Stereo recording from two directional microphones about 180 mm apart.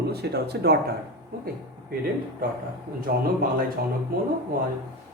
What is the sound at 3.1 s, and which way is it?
Speech, 50° right (ahead or behind).